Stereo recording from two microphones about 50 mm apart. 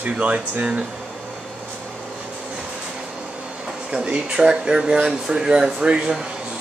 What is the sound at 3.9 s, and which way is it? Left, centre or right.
Speech, right.